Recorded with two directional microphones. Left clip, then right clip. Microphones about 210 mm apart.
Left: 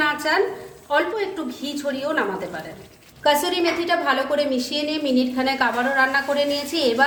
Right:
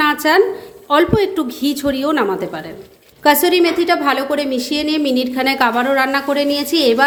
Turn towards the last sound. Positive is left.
turn(degrees=-40)  # may be behind; listen again after turning